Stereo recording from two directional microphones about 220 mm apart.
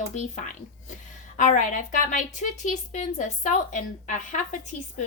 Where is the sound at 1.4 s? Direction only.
35° left (ahead or behind).